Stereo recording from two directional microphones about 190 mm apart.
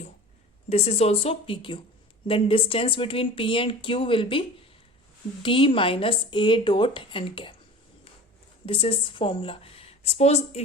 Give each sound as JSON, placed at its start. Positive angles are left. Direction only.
{"t": 0.7, "sound": "speech", "side_deg": 30}
{"t": 8.6, "sound": "a woman's voice", "side_deg": 30}